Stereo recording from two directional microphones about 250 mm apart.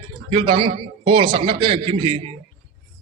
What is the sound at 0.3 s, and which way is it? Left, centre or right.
Speech, right.